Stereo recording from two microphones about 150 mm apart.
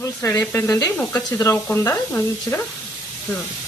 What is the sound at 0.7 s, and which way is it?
Sizzle, 20° left (ahead or behind).